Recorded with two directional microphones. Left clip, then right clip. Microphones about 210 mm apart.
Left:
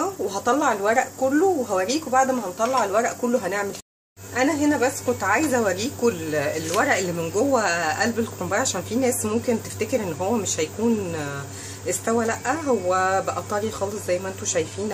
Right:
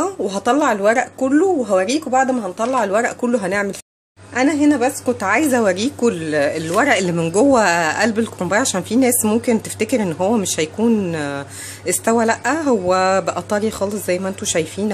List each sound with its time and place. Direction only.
0.0 s a woman's voice: 40° right (ahead or behind)